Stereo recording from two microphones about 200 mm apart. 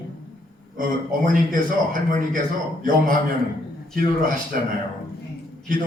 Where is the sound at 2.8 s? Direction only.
45° right (ahead or behind).